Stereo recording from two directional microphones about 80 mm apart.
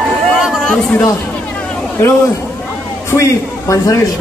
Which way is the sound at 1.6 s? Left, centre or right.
Centre.